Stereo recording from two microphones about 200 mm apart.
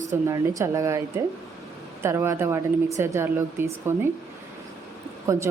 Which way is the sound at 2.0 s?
15° right (ahead or behind).